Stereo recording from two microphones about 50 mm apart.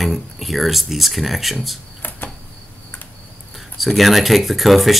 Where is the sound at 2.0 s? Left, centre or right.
Left.